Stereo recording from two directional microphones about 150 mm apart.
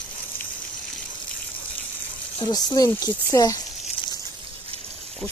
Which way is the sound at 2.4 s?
25° left (ahead or behind).